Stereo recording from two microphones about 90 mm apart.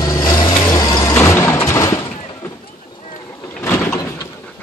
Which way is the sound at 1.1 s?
30° left (ahead or behind).